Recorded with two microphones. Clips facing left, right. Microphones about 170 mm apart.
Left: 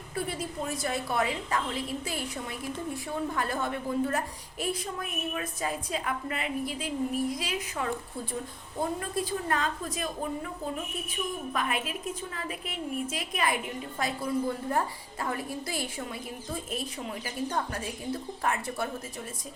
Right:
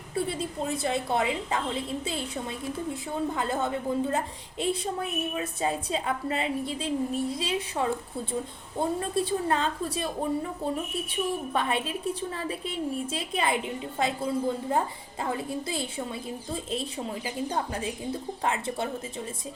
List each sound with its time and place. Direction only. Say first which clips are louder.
0.2 s a woman's voice: right 3 dB; 25° right (ahead or behind)
17.2 s a woman's voice: even; 15° right (ahead or behind)